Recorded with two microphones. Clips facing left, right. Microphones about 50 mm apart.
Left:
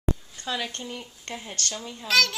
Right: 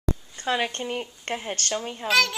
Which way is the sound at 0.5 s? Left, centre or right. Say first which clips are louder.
Right 6 dB; right.